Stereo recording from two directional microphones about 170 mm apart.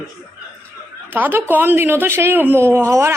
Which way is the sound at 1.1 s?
10° right (ahead or behind).